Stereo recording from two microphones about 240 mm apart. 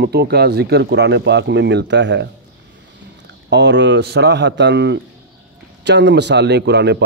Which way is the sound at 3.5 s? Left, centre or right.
Right.